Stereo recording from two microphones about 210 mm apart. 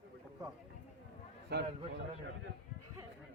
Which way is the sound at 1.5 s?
50° right (ahead or behind).